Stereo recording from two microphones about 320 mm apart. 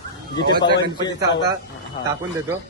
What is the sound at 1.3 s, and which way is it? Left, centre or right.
Speech, left.